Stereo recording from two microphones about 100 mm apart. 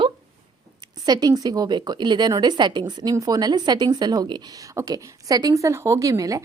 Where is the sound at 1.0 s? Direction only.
40° right (ahead or behind).